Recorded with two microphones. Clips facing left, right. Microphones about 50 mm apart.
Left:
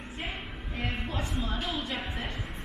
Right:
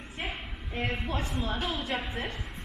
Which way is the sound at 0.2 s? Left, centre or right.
Centre.